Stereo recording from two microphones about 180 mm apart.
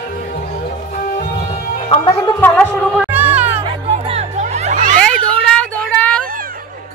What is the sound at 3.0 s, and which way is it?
Music, 10° right (ahead or behind).